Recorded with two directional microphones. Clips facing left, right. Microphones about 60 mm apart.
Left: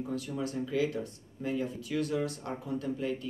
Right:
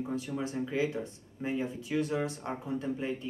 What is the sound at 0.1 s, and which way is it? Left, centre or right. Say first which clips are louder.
Speech: left 2 dB; right.